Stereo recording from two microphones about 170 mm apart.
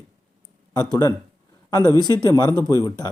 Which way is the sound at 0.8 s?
20° left (ahead or behind).